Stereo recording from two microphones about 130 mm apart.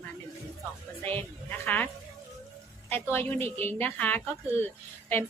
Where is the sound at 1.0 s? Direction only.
15° left (ahead or behind).